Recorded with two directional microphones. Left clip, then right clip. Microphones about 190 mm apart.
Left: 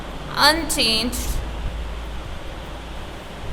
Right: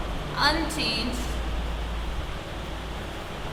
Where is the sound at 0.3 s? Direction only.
60° left (ahead or behind).